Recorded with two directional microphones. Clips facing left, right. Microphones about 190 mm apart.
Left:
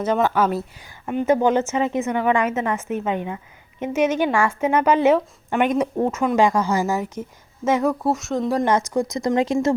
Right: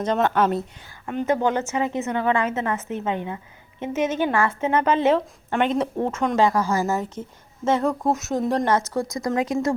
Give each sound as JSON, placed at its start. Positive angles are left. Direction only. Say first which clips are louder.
{"t": 0.0, "sound": "a woman's voice", "louder": "left 1 dB", "side_deg": 5}
{"t": 8.6, "sound": "speech", "louder": "left 2 dB", "side_deg": 15}